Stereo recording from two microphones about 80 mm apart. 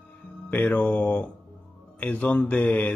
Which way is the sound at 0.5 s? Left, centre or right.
Centre.